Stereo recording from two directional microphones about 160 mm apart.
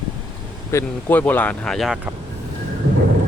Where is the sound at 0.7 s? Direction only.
10° left (ahead or behind).